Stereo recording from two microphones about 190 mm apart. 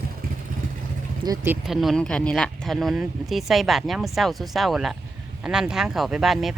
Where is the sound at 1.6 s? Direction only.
Centre (ahead or behind).